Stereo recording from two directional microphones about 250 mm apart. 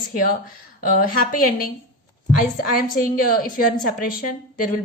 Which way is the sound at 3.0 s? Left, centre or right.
Left.